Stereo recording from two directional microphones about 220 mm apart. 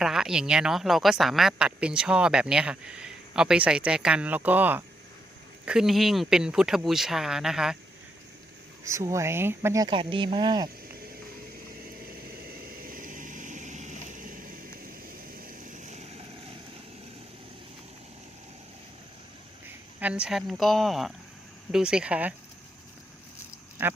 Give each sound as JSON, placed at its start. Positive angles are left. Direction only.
{"t": 0.0, "sound": "speech", "side_deg": 0}
{"t": 8.8, "sound": "speech", "side_deg": -15}
{"t": 12.9, "sound": "vehicle", "side_deg": -40}
{"t": 20.0, "sound": "speech", "side_deg": -5}
{"t": 23.8, "sound": "speech", "side_deg": -10}